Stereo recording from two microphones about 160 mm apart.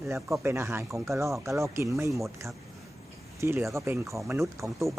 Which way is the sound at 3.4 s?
20° right (ahead or behind).